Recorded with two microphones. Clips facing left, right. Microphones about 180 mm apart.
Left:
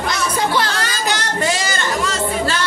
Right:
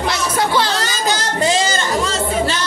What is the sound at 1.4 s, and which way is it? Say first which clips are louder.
Speech: right 5 dB; 25° right (ahead or behind).